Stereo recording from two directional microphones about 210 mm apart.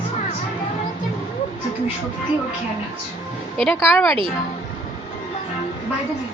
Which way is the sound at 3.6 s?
Centre (ahead or behind).